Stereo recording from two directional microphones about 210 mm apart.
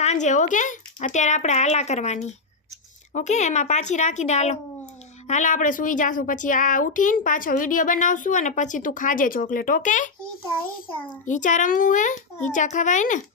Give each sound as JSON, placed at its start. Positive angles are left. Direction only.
{"t": 0.0, "sound": "a woman's voice", "side_deg": 35}
{"t": 11.3, "sound": "a woman's voice", "side_deg": 35}